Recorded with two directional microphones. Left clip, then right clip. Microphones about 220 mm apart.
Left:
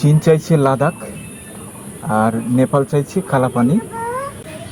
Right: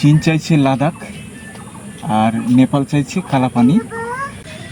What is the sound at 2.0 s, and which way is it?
Speech, centre (ahead or behind).